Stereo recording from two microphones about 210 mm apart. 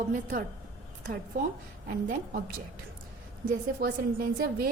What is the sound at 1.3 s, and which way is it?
A woman's voice, 45° right (ahead or behind).